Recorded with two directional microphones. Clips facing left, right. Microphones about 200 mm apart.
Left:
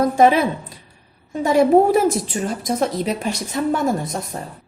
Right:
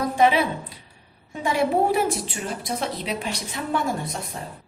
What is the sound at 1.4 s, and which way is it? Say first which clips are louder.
Speech: left 8 dB; 45° left (ahead or behind).